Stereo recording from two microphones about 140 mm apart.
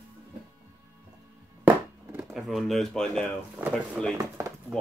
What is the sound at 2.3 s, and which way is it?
Speech, centre (ahead or behind).